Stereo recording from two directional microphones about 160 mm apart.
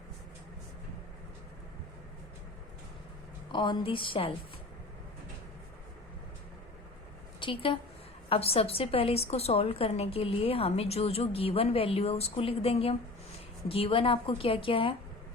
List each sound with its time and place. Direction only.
3.5 s a woman's voice: 30° left (ahead or behind)
7.3 s a woman's voice: 30° left (ahead or behind)